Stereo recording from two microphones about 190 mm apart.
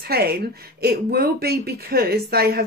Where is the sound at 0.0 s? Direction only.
55° right (ahead or behind).